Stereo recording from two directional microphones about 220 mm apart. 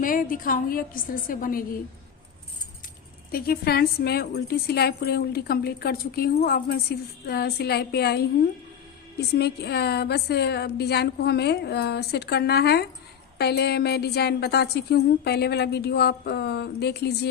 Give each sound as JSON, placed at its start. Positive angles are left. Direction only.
{"t": 0.0, "sound": "a woman's voice", "side_deg": 40}
{"t": 3.3, "sound": "a woman's voice", "side_deg": 45}
{"t": 9.3, "sound": "a woman's voice", "side_deg": 45}